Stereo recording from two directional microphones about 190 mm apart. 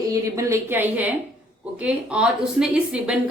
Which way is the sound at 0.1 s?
15° right (ahead or behind).